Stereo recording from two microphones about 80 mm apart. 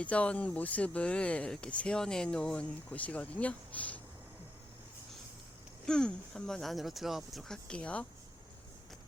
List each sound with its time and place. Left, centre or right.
0.0 s speech: centre
5.8 s speech: centre